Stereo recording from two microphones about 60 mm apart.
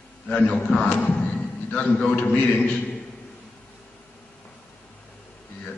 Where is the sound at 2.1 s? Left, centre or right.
Left.